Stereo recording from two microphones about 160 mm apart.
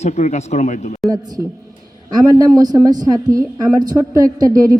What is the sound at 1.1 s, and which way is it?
A woman's voice, 25° right (ahead or behind).